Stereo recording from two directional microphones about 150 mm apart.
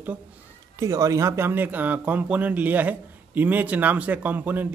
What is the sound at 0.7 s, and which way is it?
Speech, 20° right (ahead or behind).